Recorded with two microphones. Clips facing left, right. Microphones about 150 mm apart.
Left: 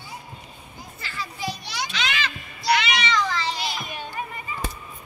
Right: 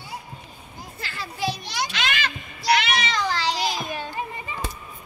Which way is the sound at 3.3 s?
90° right.